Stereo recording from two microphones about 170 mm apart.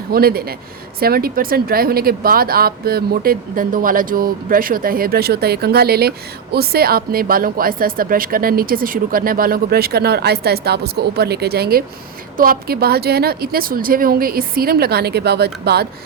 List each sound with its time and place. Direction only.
0.1 s speech: 65° right (ahead or behind)